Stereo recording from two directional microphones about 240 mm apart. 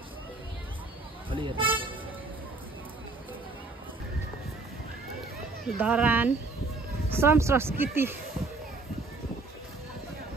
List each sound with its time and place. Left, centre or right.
1.3 s vehicle: right
5.7 s speech: centre